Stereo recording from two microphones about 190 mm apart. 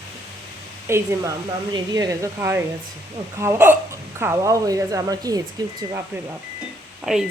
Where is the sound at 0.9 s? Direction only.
15° right (ahead or behind).